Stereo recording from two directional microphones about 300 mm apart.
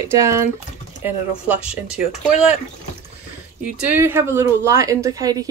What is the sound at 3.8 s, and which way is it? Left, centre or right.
Speech, centre.